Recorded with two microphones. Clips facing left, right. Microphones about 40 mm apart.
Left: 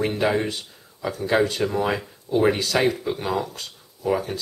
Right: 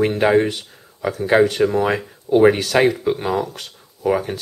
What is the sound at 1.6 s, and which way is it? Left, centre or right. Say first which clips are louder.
Speech: right 6 dB; centre.